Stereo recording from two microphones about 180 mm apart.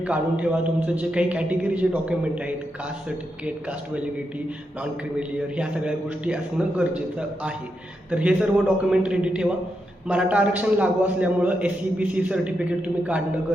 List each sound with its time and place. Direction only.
0.0 s a man's voice: 5° right (ahead or behind)
5.4 s a man's voice: 5° right (ahead or behind)